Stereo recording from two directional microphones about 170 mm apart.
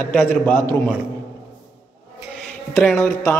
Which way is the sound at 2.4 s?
5° left (ahead or behind).